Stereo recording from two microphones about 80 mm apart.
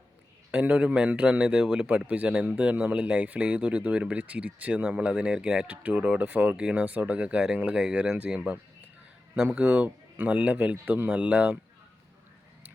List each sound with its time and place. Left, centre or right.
0.5 s a man's voice: centre